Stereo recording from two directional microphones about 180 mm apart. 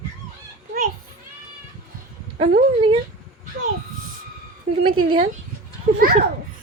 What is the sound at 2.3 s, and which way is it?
Speech, 30° right (ahead or behind).